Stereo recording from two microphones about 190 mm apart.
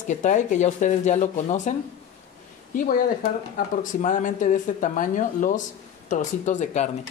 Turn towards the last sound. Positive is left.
turn(degrees=40)  # may be behind; listen again after turning